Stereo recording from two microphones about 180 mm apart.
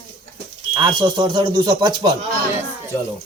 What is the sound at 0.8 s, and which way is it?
Speech, 25° right (ahead or behind).